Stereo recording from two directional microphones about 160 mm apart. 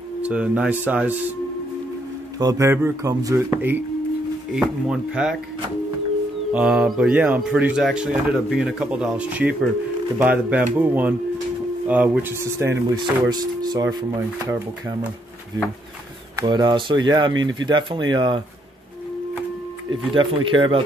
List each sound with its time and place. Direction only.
0.2 s a man's voice: 5° right (ahead or behind)
2.3 s speech: 20° right (ahead or behind); by 5.4 s 5° right (ahead or behind)
6.5 s a man's voice: 5° right (ahead or behind); by 13.9 s 25° right (ahead or behind)
16.3 s speech: 25° right (ahead or behind)
20.2 s speech: 30° right (ahead or behind)